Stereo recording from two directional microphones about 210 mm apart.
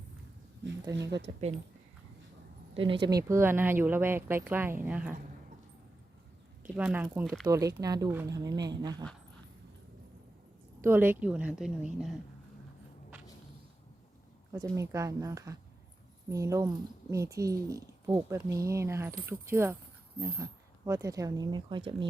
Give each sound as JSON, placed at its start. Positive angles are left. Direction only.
{"t": 0.9, "sound": "speech", "side_deg": -55}
{"t": 2.7, "sound": "speech", "side_deg": -25}
{"t": 6.6, "sound": "speech", "side_deg": -5}
{"t": 10.8, "sound": "a woman's voice", "side_deg": -10}
{"t": 14.8, "sound": "speech", "side_deg": -15}